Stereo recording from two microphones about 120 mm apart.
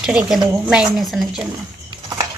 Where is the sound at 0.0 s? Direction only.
5° right (ahead or behind).